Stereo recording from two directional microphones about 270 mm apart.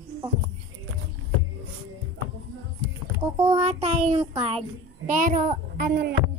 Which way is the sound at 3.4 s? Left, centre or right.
Right.